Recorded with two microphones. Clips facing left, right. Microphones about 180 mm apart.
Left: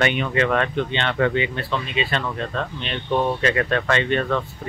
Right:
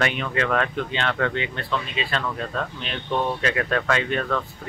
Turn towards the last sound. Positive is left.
turn(degrees=0)  # may be behind; listen again after turning